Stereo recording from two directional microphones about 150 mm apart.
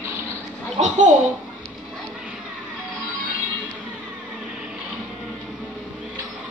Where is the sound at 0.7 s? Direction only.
50° right (ahead or behind).